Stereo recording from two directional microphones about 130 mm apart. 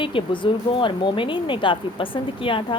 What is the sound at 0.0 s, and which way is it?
A woman's voice, 40° left (ahead or behind).